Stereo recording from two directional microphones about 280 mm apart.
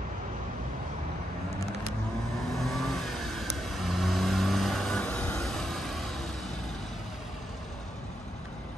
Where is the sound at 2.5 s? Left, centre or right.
Centre.